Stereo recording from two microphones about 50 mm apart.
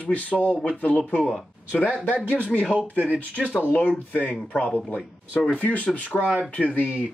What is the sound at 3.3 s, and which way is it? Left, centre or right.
Speech, right.